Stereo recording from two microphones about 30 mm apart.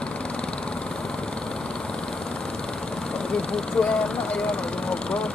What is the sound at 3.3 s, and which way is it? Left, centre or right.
Speech, left.